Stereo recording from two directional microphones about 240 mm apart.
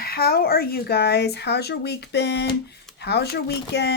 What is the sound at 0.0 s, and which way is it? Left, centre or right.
A woman's voice, left.